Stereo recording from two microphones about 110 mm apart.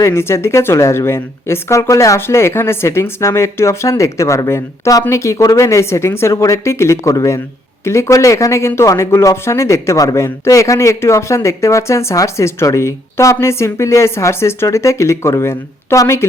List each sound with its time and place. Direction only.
0.0 s speech: 25° left (ahead or behind)